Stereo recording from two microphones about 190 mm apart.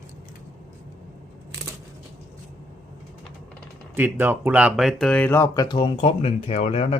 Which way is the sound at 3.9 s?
10° right (ahead or behind).